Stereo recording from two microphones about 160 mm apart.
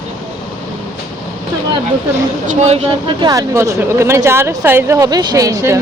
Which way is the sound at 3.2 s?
25° right (ahead or behind).